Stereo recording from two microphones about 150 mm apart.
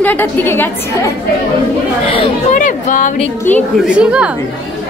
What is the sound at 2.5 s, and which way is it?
Speech, 60° left (ahead or behind).